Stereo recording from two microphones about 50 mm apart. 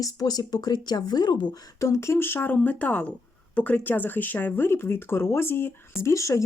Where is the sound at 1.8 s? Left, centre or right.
Left.